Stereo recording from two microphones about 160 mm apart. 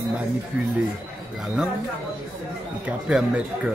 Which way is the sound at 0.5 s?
10° right (ahead or behind).